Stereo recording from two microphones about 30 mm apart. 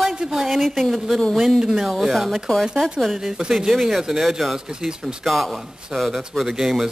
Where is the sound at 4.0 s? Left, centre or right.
Centre.